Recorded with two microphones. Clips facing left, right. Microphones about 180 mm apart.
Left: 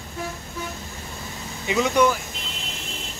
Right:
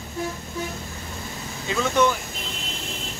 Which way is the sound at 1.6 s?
15° left (ahead or behind).